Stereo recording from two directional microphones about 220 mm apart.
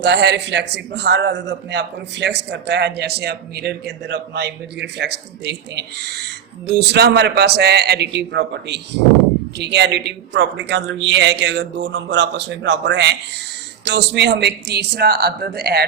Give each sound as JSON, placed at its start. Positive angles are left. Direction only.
{"t": 0.0, "sound": "a man's voice", "side_deg": -50}